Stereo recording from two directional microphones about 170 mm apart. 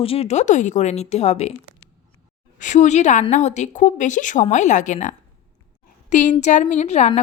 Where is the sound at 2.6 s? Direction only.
45° left (ahead or behind).